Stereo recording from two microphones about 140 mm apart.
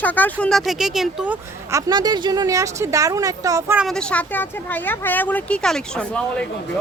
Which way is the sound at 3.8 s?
5° left (ahead or behind).